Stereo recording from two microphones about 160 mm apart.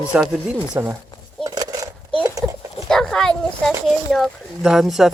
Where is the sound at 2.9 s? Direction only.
5° left (ahead or behind).